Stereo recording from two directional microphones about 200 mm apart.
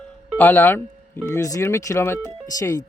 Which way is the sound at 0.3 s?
10° left (ahead or behind).